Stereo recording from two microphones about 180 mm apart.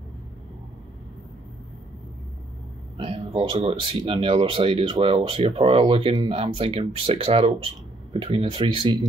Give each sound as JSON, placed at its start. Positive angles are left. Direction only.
{"t": 3.0, "sound": "speech", "side_deg": -30}